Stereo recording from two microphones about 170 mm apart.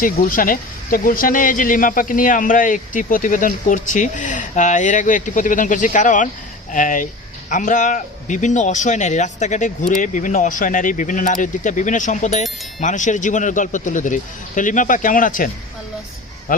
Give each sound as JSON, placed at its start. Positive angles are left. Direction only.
{"t": 0.0, "sound": "speech", "side_deg": 55}
{"t": 16.5, "sound": "speech", "side_deg": 55}